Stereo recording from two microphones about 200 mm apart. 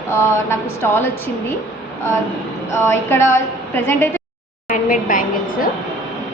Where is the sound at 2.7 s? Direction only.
15° left (ahead or behind).